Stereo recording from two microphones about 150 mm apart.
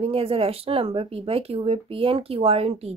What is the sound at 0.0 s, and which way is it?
A woman's voice, 40° right (ahead or behind).